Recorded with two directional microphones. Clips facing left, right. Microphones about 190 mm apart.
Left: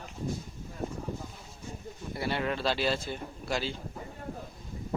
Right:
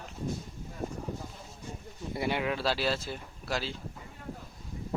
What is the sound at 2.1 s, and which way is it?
Speech, 20° right (ahead or behind).